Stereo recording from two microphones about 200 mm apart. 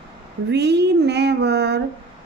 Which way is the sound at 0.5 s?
55° right (ahead or behind).